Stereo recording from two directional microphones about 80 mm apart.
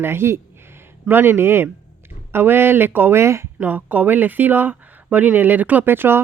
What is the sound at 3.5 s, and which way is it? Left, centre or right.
Speech, right.